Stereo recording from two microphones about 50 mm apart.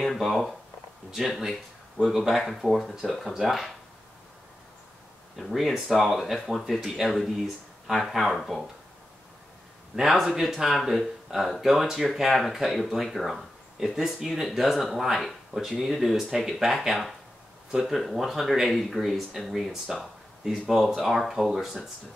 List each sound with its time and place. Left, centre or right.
0.0 s speech: centre
5.3 s speech: centre
9.9 s speech: centre